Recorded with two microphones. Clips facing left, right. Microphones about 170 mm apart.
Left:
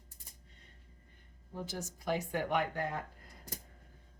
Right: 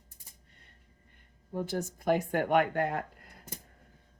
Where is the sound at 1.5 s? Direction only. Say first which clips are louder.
Right 8 dB; 55° right (ahead or behind).